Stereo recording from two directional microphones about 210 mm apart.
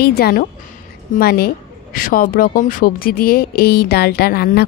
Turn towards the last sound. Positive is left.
turn(degrees=45)  # may be behind; listen again after turning